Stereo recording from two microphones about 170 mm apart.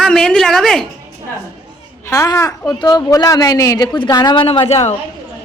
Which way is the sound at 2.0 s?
15° left (ahead or behind).